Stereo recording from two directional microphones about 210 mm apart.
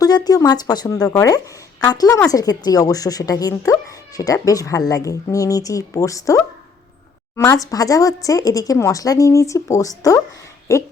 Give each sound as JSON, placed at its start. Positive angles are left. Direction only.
{"t": 0.0, "sound": "speech", "side_deg": 20}